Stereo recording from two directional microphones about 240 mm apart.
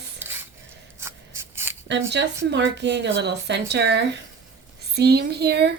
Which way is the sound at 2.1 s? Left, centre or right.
Right.